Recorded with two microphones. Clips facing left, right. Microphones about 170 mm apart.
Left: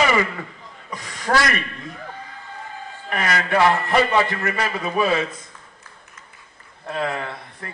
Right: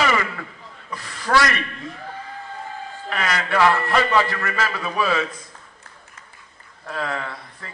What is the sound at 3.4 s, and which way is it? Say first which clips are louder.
A man's voice: even; 20° left (ahead or behind).